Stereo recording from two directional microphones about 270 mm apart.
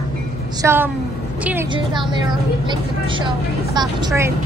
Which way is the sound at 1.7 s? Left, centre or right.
Centre.